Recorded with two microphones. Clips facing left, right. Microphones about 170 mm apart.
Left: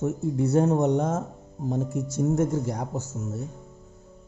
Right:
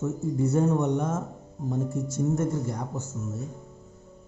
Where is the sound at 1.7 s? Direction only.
20° left (ahead or behind).